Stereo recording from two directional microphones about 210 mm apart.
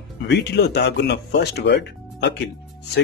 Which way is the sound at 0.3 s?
50° left (ahead or behind).